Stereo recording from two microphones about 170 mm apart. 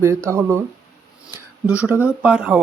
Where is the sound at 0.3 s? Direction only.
15° right (ahead or behind).